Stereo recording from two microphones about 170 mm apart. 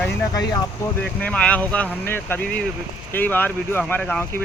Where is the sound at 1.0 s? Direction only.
5° left (ahead or behind).